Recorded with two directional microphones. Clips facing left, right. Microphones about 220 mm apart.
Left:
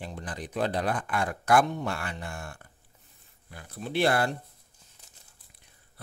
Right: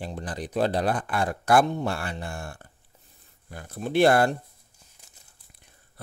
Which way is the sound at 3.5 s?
45° right (ahead or behind).